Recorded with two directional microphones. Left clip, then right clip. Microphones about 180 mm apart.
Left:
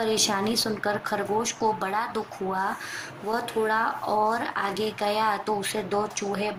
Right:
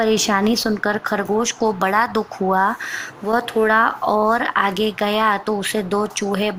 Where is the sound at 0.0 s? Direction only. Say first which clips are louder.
Right 7 dB; 35° right (ahead or behind).